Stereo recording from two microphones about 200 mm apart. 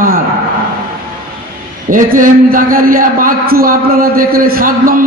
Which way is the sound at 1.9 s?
40° right (ahead or behind).